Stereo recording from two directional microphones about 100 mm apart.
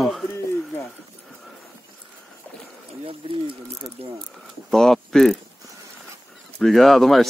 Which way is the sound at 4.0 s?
80° right.